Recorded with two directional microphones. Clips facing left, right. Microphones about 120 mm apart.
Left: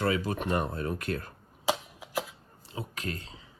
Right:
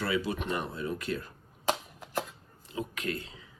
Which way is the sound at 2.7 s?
35° left (ahead or behind).